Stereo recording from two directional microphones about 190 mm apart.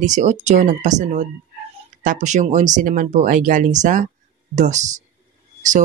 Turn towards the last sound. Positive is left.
turn(degrees=-40)  # may be behind; listen again after turning